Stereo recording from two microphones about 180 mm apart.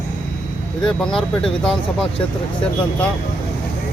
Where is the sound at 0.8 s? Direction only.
5° left (ahead or behind).